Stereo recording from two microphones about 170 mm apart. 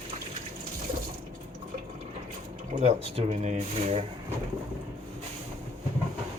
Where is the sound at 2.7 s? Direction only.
40° right (ahead or behind).